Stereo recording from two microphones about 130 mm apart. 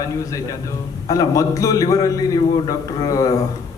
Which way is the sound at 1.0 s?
25° left (ahead or behind).